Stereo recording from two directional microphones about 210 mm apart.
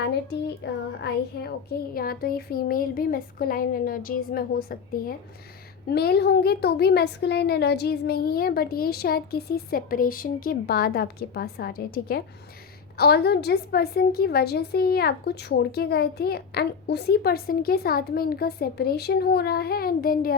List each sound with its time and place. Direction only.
0.6 s a woman's voice: 50° left (ahead or behind)